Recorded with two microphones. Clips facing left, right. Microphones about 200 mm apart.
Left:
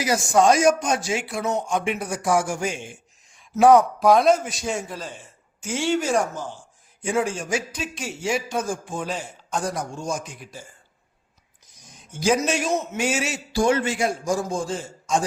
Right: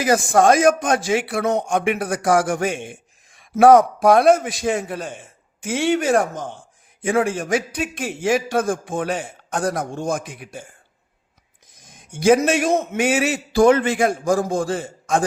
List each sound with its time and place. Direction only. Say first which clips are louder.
0.0 s a man's voice: right 3 dB; 55° right (ahead or behind)
11.8 s a man's voice: right 5 dB; 55° right (ahead or behind)